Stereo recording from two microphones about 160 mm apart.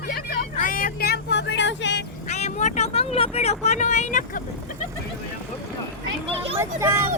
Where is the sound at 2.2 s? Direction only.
45° left (ahead or behind).